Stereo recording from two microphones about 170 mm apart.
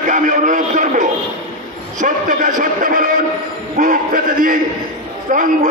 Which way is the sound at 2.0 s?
50° right (ahead or behind).